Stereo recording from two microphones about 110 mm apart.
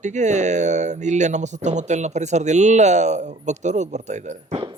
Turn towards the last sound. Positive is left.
turn(degrees=-90)